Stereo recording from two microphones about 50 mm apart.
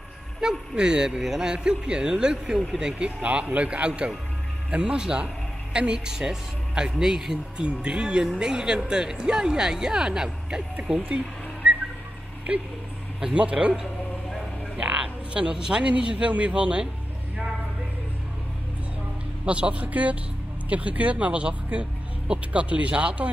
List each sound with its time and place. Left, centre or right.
0.4 s speech: centre
1.1 s speech: centre
1.5 s a man's voice: centre
11.1 s a sound: right
12.5 s a man's voice: right
19.4 s a man's voice: right